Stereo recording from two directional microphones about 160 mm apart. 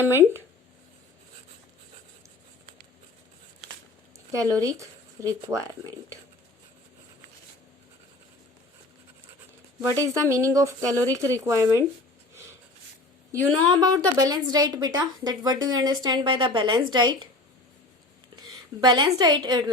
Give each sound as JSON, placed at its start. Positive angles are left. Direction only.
{"t": 0.0, "sound": "speech", "side_deg": -15}
{"t": 4.3, "sound": "a woman's voice", "side_deg": -20}
{"t": 9.9, "sound": "a woman's voice", "side_deg": -20}
{"t": 13.3, "sound": "a woman's voice", "side_deg": -25}
{"t": 18.4, "sound": "a woman's voice", "side_deg": -25}